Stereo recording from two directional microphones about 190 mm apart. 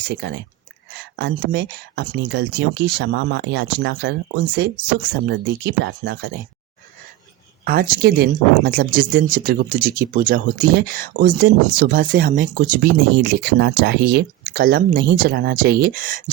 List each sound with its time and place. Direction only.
0.1 s speech: 70° right (ahead or behind)
7.6 s speech: 50° right (ahead or behind)